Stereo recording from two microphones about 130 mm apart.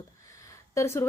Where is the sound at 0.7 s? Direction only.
20° left (ahead or behind).